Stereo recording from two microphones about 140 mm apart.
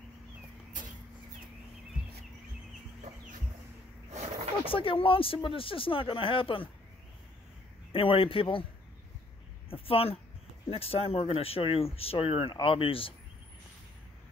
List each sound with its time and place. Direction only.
4.1 s a sound: 50° right (ahead or behind)
4.6 s speech: 40° left (ahead or behind)
7.9 s speech: 40° left (ahead or behind)
9.7 s speech: 40° left (ahead or behind)